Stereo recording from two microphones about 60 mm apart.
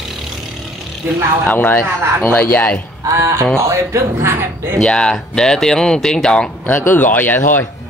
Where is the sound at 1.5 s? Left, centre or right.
Left.